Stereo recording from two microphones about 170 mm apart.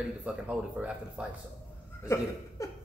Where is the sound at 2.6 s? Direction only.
20° left (ahead or behind).